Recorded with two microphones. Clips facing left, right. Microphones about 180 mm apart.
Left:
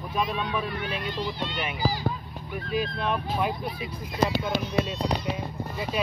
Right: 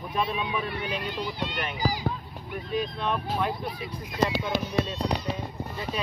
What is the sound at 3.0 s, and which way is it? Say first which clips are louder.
Speech: left 1 dB; 5° left (ahead or behind).